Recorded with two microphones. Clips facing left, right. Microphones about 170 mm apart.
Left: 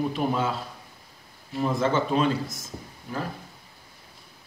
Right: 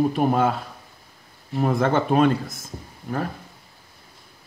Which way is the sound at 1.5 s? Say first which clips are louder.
Right 3 dB; 60° right (ahead or behind).